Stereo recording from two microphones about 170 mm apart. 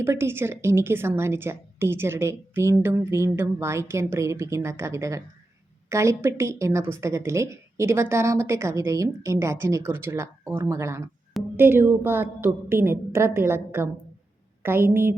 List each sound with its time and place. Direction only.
0.0 s a woman's voice: 15° right (ahead or behind)